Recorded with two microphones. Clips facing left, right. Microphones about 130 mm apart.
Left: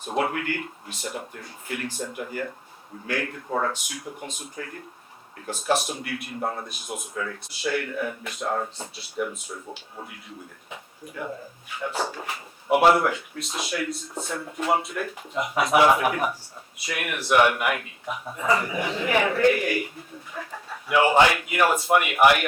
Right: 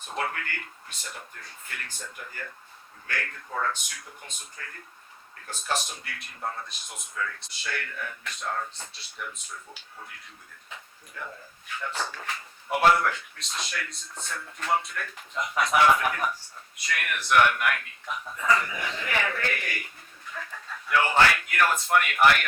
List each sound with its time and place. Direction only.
0.2 s a man's voice: 15° left (ahead or behind)
7.6 s a man's voice: 10° left (ahead or behind)
11.8 s a man's voice: 15° left (ahead or behind)
14.3 s speech: 20° left (ahead or behind)
14.7 s a man's voice: 5° left (ahead or behind)
20.4 s a man's voice: 25° left (ahead or behind)